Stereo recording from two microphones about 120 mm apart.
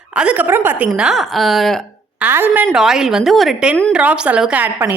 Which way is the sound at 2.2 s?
15° right (ahead or behind).